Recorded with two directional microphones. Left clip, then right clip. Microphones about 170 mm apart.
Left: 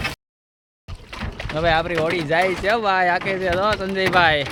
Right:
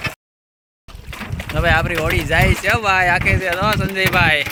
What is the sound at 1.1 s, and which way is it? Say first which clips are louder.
Boat: right 2 dB; 65° right (ahead or behind).